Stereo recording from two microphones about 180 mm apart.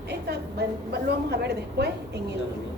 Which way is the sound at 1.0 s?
65° right (ahead or behind).